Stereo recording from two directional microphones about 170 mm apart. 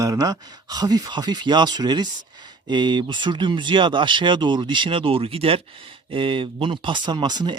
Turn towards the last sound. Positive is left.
turn(degrees=-25)  # may be behind; listen again after turning